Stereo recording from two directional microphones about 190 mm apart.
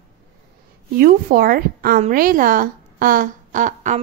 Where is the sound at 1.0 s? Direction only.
50° right (ahead or behind).